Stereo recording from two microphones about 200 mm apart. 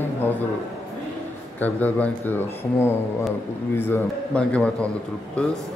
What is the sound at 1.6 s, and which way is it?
Speech, 10° left (ahead or behind).